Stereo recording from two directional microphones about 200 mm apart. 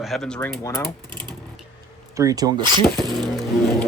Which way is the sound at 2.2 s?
20° right (ahead or behind).